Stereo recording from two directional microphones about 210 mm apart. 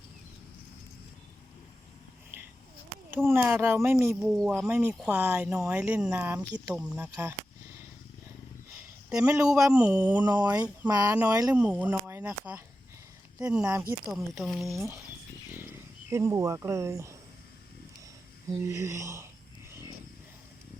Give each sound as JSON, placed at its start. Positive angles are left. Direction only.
{"t": 2.3, "sound": "a sound", "side_deg": -10}
{"t": 3.1, "sound": "speech", "side_deg": -10}
{"t": 8.7, "sound": "a sound", "side_deg": -5}
{"t": 9.6, "sound": "speech", "side_deg": -10}
{"t": 10.2, "sound": "speech", "side_deg": -20}
{"t": 10.5, "sound": "speech", "side_deg": -10}
{"t": 15.5, "sound": "cricket", "side_deg": -10}
{"t": 18.4, "sound": "speech", "side_deg": -15}